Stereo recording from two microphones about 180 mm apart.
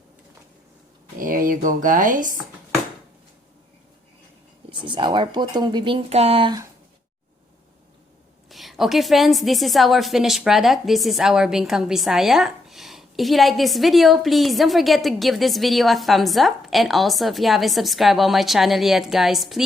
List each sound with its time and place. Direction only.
1.2 s speech: 50° right (ahead or behind)
4.7 s speech: 25° right (ahead or behind)
8.4 s a woman's voice: centre (ahead or behind)